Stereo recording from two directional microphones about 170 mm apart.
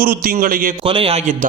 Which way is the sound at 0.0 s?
60° right (ahead or behind).